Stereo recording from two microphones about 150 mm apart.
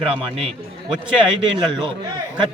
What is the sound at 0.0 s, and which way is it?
A man's voice, 35° right (ahead or behind).